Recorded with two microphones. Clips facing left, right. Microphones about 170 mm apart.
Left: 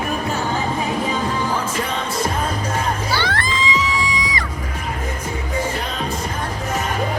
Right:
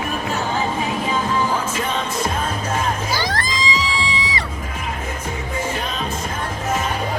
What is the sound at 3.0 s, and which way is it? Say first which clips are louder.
Music: left 1 dB; 40° right (ahead or behind).